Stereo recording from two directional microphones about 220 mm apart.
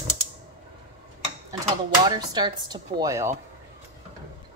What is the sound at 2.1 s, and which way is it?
Speech, 20° right (ahead or behind).